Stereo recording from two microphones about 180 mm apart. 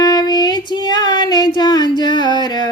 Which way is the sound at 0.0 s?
20° left (ahead or behind).